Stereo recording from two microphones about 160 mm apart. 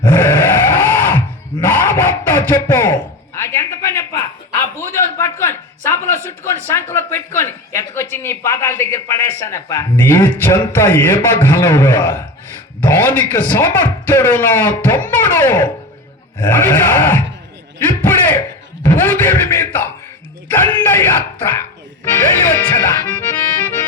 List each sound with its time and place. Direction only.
0.0 s grunt: 15° left (ahead or behind)
1.6 s a sound: 15° left (ahead or behind)
5.1 s speech: 15° left (ahead or behind)
18.0 s a sound: 15° left (ahead or behind)
18.9 s speech: 15° left (ahead or behind)
22.2 s accordion: 15° left (ahead or behind)